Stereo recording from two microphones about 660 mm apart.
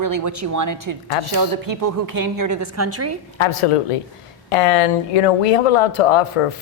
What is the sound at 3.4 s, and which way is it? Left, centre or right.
Speech, left.